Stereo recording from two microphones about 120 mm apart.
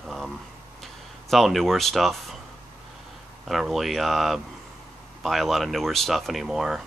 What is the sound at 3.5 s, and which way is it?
Speech, centre (ahead or behind).